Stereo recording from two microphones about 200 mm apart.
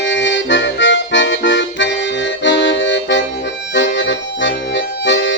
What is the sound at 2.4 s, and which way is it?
Music, 65° left (ahead or behind).